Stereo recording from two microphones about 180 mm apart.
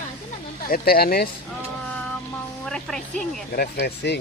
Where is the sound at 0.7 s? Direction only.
55° left (ahead or behind).